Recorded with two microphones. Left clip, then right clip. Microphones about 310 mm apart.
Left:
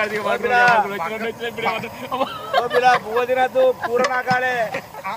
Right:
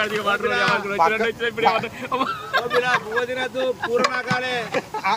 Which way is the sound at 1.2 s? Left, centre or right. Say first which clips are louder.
Right 4 dB; centre.